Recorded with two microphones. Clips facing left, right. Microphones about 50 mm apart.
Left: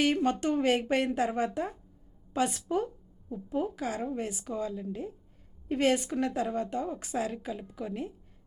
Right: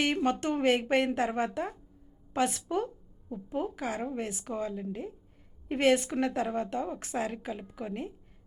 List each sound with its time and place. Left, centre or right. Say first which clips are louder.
0.0 s speech: left 1 dB; right
2.3 s a woman's voice: even; right
3.2 s speech: left 2 dB; centre